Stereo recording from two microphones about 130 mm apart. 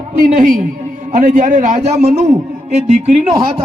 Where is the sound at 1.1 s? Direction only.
80° right.